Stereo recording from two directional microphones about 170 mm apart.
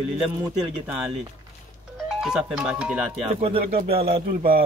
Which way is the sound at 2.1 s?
5° right (ahead or behind).